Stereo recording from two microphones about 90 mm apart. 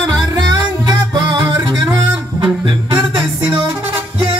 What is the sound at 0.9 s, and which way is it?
Music, 50° right (ahead or behind).